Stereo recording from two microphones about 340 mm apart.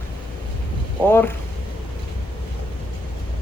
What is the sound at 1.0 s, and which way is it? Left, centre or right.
Speech, centre.